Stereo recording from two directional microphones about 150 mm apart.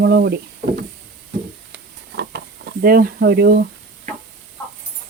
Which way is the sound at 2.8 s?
80° right.